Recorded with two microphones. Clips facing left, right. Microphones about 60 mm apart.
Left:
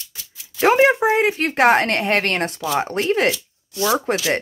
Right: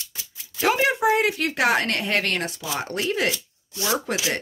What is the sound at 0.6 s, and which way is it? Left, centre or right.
A woman's voice, left.